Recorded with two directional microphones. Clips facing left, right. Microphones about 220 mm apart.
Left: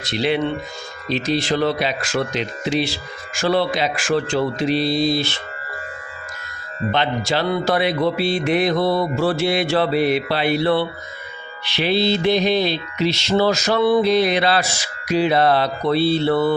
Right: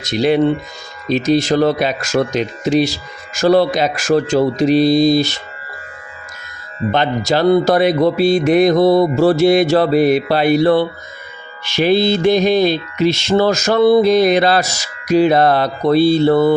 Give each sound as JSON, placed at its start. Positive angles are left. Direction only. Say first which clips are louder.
{"t": 0.0, "sound": "mantra", "louder": "right 7 dB", "side_deg": -45}
{"t": 6.9, "sound": "mantra", "louder": "right 5 dB", "side_deg": -45}